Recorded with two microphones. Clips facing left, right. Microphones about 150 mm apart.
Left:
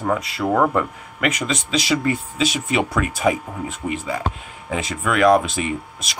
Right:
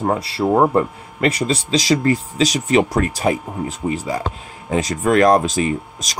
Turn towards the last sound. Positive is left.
turn(degrees=-40)  # may be behind; listen again after turning